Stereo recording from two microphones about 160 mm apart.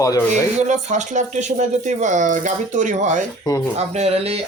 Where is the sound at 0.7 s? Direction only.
50° right (ahead or behind).